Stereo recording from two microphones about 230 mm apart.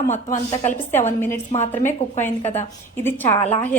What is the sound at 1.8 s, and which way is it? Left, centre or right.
Speech, left.